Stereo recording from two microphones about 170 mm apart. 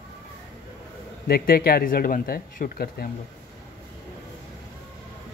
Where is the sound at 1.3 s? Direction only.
65° left (ahead or behind).